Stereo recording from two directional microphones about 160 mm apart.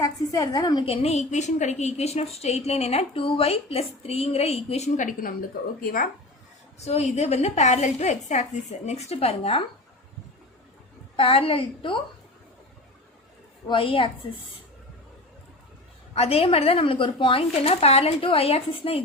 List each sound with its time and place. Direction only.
0.0 s a woman's voice: 20° left (ahead or behind); by 6.1 s 65° left (ahead or behind)
6.7 s a woman's voice: 40° left (ahead or behind)
11.2 s a woman's voice: 35° left (ahead or behind)
13.7 s a woman's voice: 35° left (ahead or behind)
16.1 s a woman's voice: 40° left (ahead or behind)